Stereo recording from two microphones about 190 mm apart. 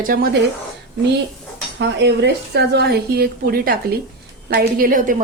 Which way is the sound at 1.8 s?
65° right (ahead or behind).